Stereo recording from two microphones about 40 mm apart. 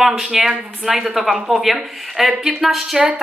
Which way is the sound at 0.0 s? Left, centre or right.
Centre.